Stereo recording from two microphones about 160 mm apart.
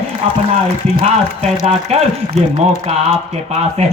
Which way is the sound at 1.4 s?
40° right (ahead or behind).